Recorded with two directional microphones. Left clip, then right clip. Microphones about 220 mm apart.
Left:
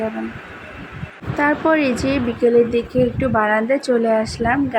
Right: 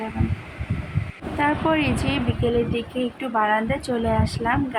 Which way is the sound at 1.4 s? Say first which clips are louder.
Left 5 dB; 20° left (ahead or behind).